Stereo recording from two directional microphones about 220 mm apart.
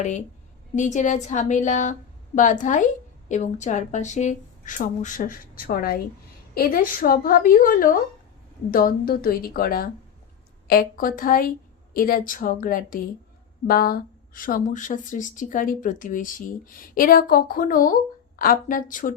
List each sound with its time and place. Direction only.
0.0 s speech: 35° left (ahead or behind)